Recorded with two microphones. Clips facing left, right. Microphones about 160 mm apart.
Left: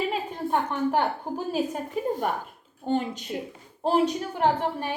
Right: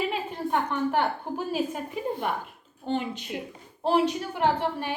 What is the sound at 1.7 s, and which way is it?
A woman's voice, 40° left (ahead or behind).